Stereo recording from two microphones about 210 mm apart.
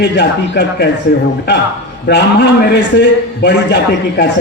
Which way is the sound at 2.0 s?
55° left (ahead or behind).